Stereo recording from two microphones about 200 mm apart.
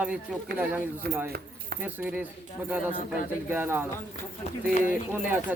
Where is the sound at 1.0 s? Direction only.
55° right (ahead or behind).